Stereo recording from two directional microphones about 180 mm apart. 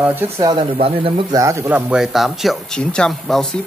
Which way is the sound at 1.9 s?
Centre (ahead or behind).